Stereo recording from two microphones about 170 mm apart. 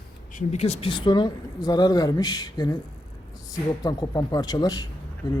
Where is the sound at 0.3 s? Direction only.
40° left (ahead or behind).